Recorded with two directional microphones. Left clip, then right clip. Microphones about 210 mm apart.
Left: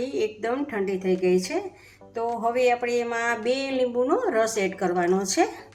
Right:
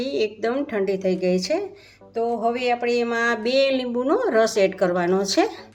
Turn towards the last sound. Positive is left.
turn(degrees=-45)  # may be behind; listen again after turning